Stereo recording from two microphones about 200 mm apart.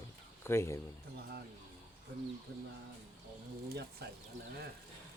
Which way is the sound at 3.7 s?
50° right (ahead or behind).